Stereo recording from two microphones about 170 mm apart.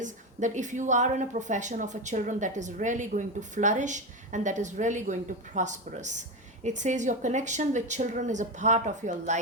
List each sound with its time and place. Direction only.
0.0 s speech: 45° right (ahead or behind)